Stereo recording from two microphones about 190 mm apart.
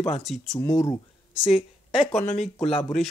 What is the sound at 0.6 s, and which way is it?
Speech, 15° left (ahead or behind).